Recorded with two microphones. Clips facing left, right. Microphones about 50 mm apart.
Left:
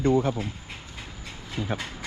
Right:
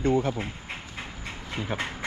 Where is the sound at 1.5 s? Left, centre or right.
Right.